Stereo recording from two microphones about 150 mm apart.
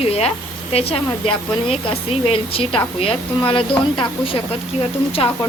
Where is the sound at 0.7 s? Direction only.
40° left (ahead or behind).